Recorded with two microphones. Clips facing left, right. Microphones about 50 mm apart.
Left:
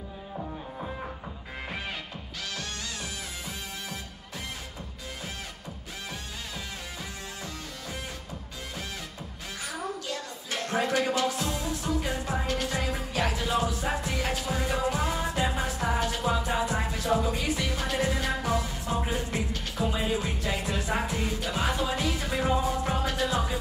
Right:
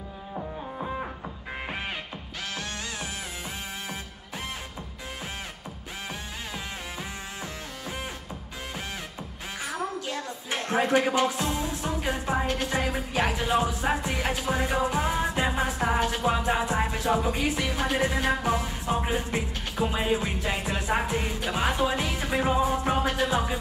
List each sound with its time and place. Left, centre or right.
10.0 s music: right